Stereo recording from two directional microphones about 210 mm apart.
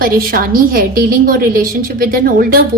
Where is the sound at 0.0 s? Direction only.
45° right (ahead or behind).